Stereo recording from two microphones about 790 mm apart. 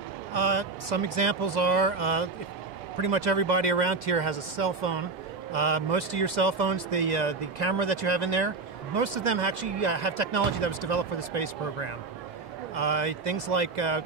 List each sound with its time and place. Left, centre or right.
0.3 s speech: right